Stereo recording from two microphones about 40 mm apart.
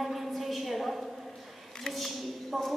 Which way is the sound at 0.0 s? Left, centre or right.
Centre.